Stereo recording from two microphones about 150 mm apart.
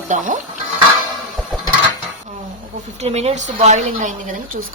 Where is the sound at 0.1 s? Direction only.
55° right (ahead or behind).